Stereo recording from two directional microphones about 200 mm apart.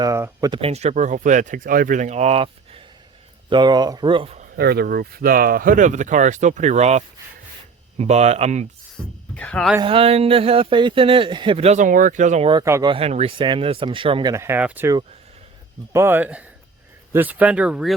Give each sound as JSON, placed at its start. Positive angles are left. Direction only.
{"t": 0.0, "sound": "speech", "side_deg": -15}
{"t": 0.6, "sound": "speech", "side_deg": -30}
{"t": 4.5, "sound": "speech", "side_deg": -50}
{"t": 9.3, "sound": "speech", "side_deg": 5}
{"t": 9.8, "sound": "speech", "side_deg": -30}
{"t": 12.5, "sound": "speech", "side_deg": -20}
{"t": 12.9, "sound": "speech", "side_deg": -30}